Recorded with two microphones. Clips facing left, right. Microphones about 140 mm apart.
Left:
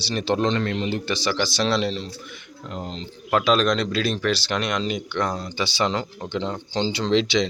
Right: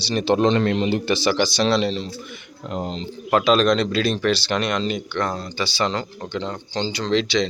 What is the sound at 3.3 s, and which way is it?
Speech, centre (ahead or behind).